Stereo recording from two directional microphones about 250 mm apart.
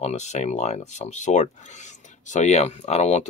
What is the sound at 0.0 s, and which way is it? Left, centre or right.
Speech, left.